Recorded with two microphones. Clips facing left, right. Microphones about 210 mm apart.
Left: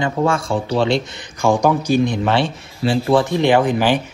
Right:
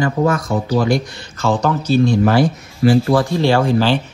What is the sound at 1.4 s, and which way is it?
Speech, 15° left (ahead or behind).